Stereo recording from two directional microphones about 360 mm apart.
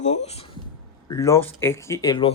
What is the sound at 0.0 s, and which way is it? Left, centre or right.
Speech, centre.